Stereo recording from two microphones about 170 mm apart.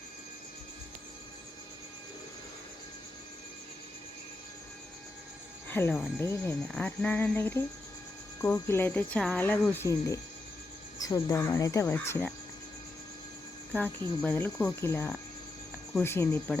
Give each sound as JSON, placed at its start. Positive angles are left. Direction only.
{"t": 5.6, "sound": "frog", "side_deg": 10}
{"t": 10.9, "sound": "speech", "side_deg": 20}
{"t": 13.7, "sound": "frog", "side_deg": 10}